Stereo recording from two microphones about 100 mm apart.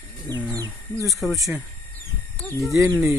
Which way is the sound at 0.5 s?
35° right (ahead or behind).